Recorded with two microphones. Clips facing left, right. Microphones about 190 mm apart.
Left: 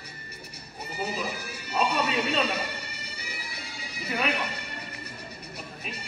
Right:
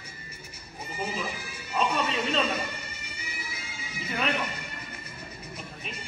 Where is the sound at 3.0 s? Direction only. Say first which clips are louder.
Left 1 dB; 35° left (ahead or behind).